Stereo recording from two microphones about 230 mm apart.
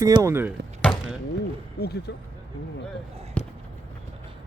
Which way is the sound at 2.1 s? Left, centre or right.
Left.